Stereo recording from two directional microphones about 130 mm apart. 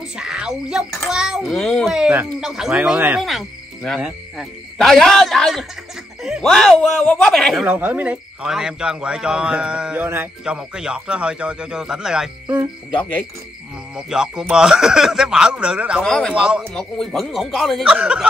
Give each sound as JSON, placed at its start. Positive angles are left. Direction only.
{"t": 0.1, "sound": "a child's voice", "side_deg": -5}
{"t": 3.2, "sound": "cricket", "side_deg": 0}
{"t": 4.0, "sound": "a child's voice", "side_deg": 0}
{"t": 7.6, "sound": "speech", "side_deg": -10}
{"t": 10.4, "sound": "speech", "side_deg": -5}
{"t": 13.9, "sound": "a child's voice", "side_deg": -5}
{"t": 16.0, "sound": "a child's voice", "side_deg": 5}
{"t": 16.3, "sound": "a child's voice", "side_deg": -5}